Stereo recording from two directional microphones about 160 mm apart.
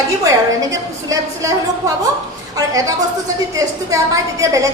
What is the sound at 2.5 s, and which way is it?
Speech, 20° right (ahead or behind).